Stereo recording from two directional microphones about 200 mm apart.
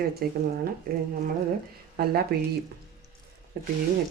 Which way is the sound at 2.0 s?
50° right (ahead or behind).